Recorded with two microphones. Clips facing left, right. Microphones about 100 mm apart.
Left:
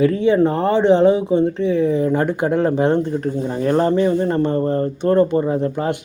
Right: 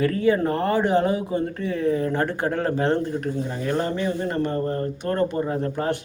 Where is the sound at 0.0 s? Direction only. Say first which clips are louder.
Left 6 dB; 20° left (ahead or behind).